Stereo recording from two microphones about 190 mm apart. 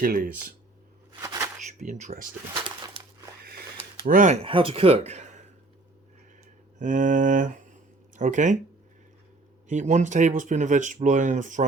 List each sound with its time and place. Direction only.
0.0 s speech: 50° right (ahead or behind)
1.2 s a sound: 15° right (ahead or behind)
1.6 s speech: 40° right (ahead or behind)
4.0 s speech: 40° right (ahead or behind)
4.4 s speech: 30° right (ahead or behind)
6.7 s speech: 40° right (ahead or behind)
9.6 s speech: 40° right (ahead or behind)